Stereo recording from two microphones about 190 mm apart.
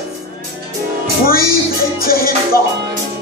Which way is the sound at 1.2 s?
50° left (ahead or behind).